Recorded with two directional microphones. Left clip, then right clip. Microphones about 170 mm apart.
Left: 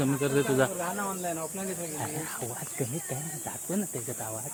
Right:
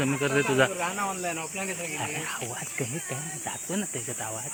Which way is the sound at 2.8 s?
15° left (ahead or behind).